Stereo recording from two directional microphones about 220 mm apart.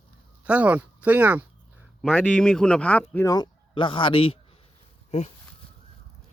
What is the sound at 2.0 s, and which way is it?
A man's voice, 5° left (ahead or behind).